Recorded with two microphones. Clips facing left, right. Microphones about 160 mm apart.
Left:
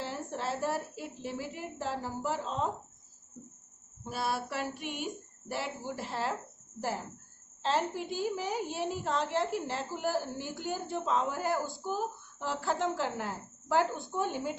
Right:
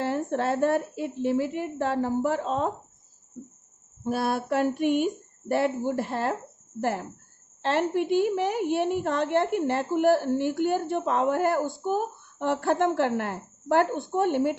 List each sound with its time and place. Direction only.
0.0 s a woman's voice: 60° right (ahead or behind)
4.0 s speech: 55° right (ahead or behind)
7.6 s a woman's voice: 65° right (ahead or behind)